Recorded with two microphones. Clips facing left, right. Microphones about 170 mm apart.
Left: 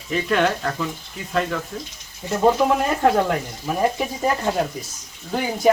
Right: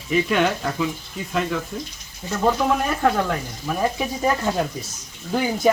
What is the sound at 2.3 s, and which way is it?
Speech, 20° left (ahead or behind).